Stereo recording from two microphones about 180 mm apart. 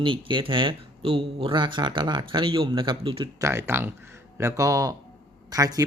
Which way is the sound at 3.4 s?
15° right (ahead or behind).